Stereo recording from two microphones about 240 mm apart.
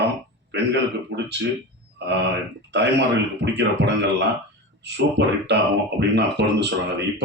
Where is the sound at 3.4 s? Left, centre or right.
Right.